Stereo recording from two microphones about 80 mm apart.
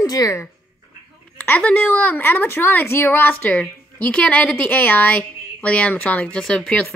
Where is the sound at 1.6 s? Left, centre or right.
Centre.